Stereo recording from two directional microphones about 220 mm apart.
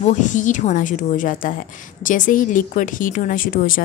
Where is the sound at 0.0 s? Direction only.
35° left (ahead or behind).